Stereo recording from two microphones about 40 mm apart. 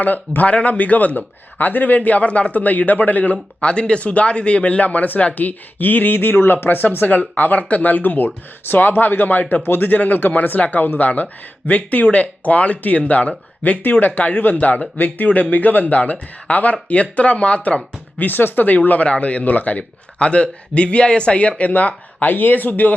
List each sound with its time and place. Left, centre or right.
0.0 s speech: left
2.0 s speech: left
3.6 s speech: left
8.6 s speech: left
18.2 s speech: left
22.3 s speech: left